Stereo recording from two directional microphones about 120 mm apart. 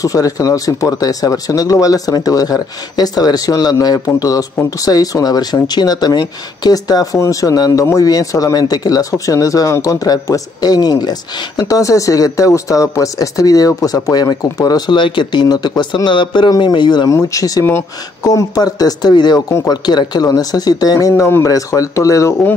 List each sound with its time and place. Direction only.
0.0 s speech: 30° left (ahead or behind)